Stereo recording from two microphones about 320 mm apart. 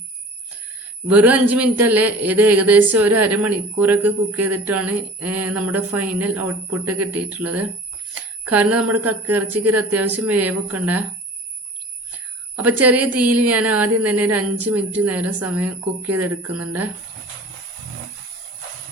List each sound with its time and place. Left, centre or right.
1.0 s a woman's voice: centre
8.1 s bicycle bell: centre
9.0 s a woman's voice: centre
12.5 s a woman's voice: centre
13.2 s a sound: right
13.5 s a woman's voice: centre